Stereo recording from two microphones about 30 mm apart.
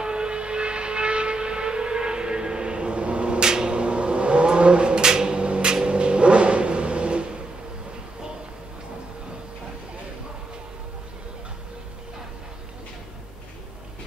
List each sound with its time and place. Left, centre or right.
0.0 s vehicle: right
3.4 s a sound: right
3.7 s vehicle: right
5.5 s music: right